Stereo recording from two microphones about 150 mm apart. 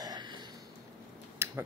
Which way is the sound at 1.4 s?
20° right (ahead or behind).